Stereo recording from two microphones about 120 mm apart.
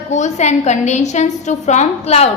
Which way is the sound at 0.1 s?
75° left (ahead or behind).